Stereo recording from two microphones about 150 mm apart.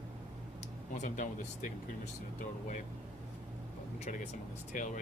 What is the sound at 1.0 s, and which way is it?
Speech, 60° left (ahead or behind).